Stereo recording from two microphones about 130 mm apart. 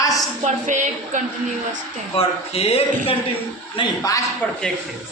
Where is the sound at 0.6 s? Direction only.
70° right (ahead or behind).